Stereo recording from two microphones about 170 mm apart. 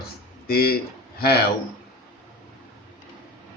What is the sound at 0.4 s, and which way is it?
Speech, 65° left (ahead or behind).